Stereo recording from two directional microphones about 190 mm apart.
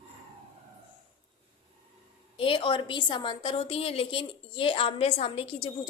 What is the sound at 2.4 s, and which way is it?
A woman's voice, 25° left (ahead or behind).